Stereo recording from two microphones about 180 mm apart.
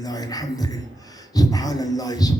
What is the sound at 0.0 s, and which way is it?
Speech, 20° left (ahead or behind).